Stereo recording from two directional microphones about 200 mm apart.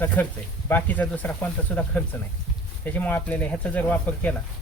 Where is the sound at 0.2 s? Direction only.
10° left (ahead or behind).